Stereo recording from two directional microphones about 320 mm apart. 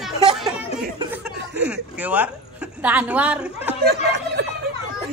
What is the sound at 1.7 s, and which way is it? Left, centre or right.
Speech, centre.